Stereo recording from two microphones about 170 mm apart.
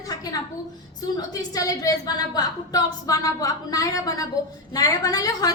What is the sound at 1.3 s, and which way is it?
A woman's voice, 20° left (ahead or behind).